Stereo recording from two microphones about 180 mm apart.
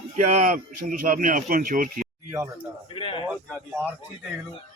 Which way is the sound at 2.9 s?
30° left (ahead or behind).